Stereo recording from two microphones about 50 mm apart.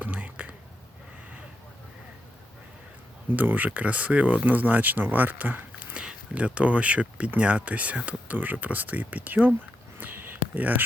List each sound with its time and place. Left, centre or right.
0.0 s whispering: right
3.3 s speech: right
5.9 s speech: right
10.0 s a sound: right